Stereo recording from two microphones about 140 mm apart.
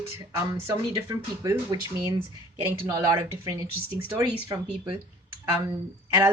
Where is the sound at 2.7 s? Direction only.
20° right (ahead or behind).